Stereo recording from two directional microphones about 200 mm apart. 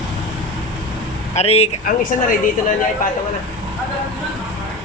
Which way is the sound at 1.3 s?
30° left (ahead or behind).